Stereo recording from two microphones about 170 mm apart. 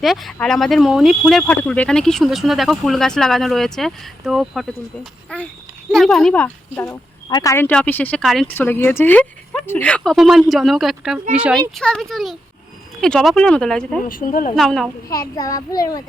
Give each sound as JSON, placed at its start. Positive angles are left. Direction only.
{"t": 0.0, "sound": "speech", "side_deg": 0}
{"t": 7.3, "sound": "speech", "side_deg": 20}
{"t": 8.5, "sound": "speech", "side_deg": 10}
{"t": 14.0, "sound": "speech", "side_deg": 55}
{"t": 14.5, "sound": "speech", "side_deg": 0}
{"t": 15.1, "sound": "a child's voice", "side_deg": 20}